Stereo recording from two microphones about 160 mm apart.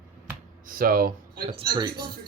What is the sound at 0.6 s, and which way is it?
Speech, 65° right (ahead or behind).